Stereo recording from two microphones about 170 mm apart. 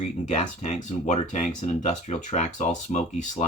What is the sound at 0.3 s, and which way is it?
Speech, 40° left (ahead or behind).